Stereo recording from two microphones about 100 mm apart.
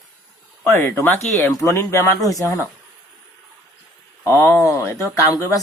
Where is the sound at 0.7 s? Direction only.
20° left (ahead or behind).